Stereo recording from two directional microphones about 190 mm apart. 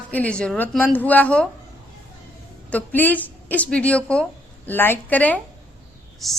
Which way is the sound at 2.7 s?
10° left (ahead or behind).